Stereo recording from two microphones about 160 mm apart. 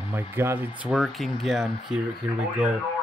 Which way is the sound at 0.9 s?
Centre (ahead or behind).